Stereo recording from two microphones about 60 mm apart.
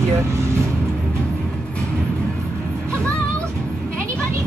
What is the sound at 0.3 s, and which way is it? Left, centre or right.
Vehicle, right.